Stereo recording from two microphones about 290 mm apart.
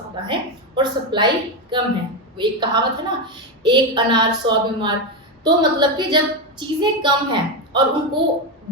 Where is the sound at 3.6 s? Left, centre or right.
Centre.